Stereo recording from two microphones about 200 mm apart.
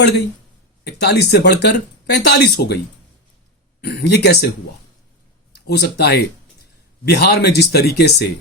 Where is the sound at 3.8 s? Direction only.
55° left (ahead or behind).